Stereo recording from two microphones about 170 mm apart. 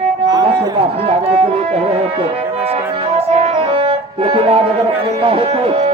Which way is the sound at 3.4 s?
35° right (ahead or behind).